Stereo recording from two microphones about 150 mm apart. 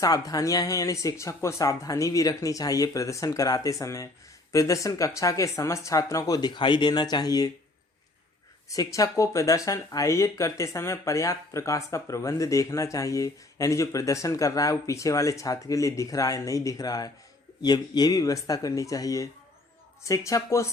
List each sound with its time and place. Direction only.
0.0 s speech: 25° left (ahead or behind)
8.7 s speech: 25° left (ahead or behind)